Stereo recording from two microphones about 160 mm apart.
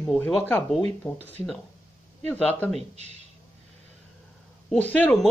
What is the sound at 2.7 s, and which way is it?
Speech, 45° right (ahead or behind).